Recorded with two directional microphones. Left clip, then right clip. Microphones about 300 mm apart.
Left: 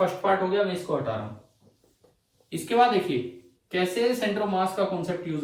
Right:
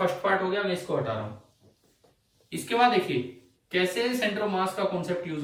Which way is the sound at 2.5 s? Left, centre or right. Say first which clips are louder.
Left 2 dB; centre.